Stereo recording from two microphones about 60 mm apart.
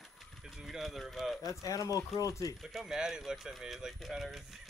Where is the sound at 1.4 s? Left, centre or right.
Left.